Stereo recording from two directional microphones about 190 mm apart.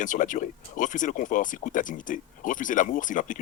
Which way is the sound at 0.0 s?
45° left (ahead or behind).